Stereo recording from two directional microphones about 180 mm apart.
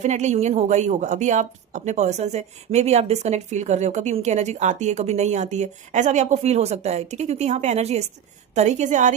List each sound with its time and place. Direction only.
0.0 s a woman's voice: 40° right (ahead or behind)